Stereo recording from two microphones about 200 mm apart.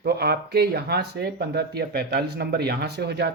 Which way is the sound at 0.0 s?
55° right (ahead or behind).